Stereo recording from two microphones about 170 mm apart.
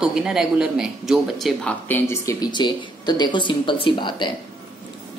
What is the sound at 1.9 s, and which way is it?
Speech, 15° left (ahead or behind).